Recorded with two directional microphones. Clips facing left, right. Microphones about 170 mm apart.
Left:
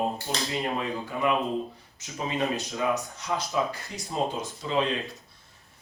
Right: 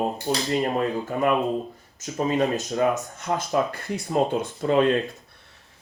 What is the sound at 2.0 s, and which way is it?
Speech, 45° right (ahead or behind).